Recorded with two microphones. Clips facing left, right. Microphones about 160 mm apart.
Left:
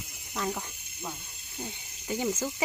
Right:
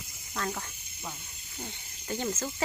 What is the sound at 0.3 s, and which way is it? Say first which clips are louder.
Speech: left 2 dB; 10° left (ahead or behind).